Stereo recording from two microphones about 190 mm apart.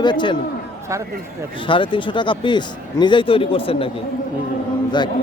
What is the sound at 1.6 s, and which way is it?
A man's voice, 25° left (ahead or behind).